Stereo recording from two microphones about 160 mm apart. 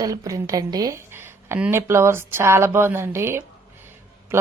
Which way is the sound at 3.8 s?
15° right (ahead or behind).